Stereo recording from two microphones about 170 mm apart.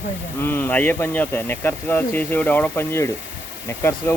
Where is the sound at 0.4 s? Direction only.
15° left (ahead or behind).